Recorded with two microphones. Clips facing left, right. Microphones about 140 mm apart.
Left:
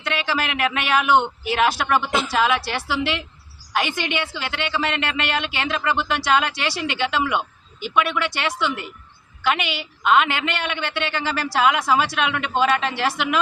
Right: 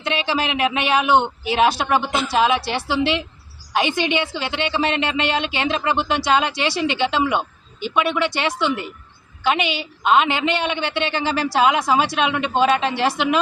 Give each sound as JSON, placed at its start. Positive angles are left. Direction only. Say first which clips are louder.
{"t": 0.0, "sound": "a woman's voice", "louder": "right 2 dB", "side_deg": -20}